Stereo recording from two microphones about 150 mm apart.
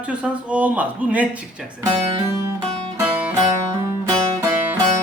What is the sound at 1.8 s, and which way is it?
Speech, 25° right (ahead or behind).